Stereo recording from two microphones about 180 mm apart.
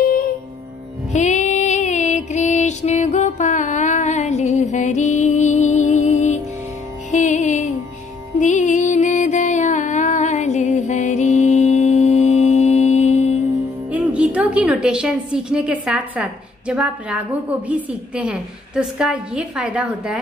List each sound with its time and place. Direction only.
1.1 s music: 40° left (ahead or behind)
13.9 s a woman's voice: 5° right (ahead or behind)